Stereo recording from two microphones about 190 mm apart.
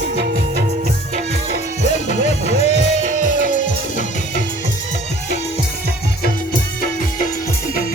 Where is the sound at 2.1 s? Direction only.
35° left (ahead or behind).